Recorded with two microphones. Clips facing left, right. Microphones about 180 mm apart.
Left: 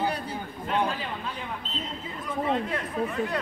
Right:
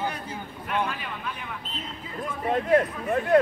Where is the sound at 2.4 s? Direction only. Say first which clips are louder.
Right 9 dB; 50° right (ahead or behind).